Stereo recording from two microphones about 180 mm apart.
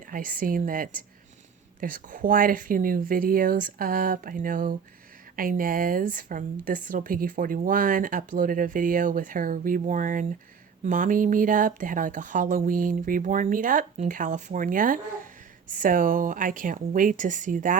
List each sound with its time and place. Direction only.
0.1 s a woman's voice: 50° right (ahead or behind)